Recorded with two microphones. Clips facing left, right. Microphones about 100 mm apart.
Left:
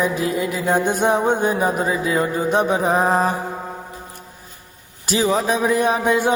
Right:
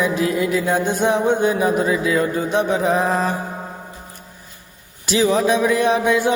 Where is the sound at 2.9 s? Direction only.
40° left (ahead or behind).